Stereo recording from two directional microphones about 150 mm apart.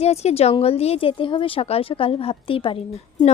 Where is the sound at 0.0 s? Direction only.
45° left (ahead or behind).